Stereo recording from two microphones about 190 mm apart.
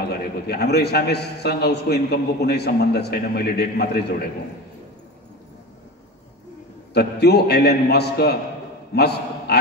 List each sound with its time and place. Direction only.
0.0 s a man's voice: 55° left (ahead or behind)
6.9 s a man's voice: 60° left (ahead or behind)